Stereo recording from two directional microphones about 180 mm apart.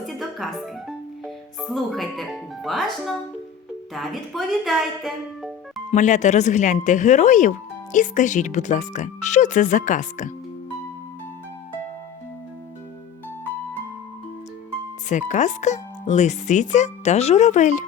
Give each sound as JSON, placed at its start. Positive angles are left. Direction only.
{"t": 0.0, "sound": "music", "side_deg": 0}
{"t": 3.9, "sound": "speech", "side_deg": 0}
{"t": 5.9, "sound": "speech", "side_deg": 40}
{"t": 15.1, "sound": "speech", "side_deg": 40}